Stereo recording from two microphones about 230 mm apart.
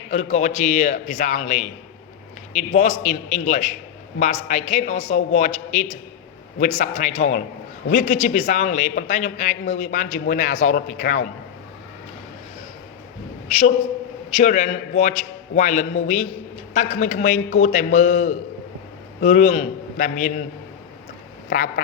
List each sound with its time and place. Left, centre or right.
0.1 s a man's voice: left
13.5 s a man's voice: left
21.5 s a man's voice: left